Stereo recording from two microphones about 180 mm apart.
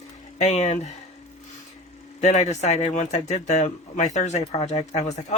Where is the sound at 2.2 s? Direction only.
40° left (ahead or behind).